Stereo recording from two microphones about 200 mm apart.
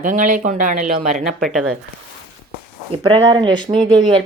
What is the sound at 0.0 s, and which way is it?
Speech, 40° right (ahead or behind).